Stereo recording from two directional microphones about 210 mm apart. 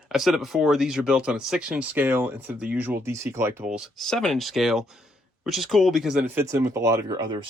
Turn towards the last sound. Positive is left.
turn(degrees=-20)  # may be behind; listen again after turning